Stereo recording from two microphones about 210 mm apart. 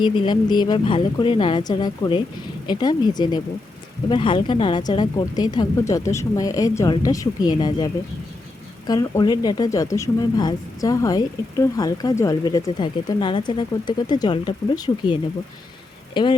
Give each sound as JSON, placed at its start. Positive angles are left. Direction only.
{"t": 0.0, "sound": "speech", "side_deg": 20}
{"t": 8.9, "sound": "speech", "side_deg": 20}